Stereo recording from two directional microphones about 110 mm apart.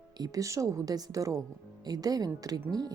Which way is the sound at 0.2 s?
30° right (ahead or behind).